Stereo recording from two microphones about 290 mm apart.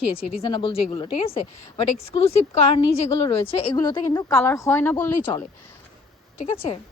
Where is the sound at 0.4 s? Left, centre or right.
Centre.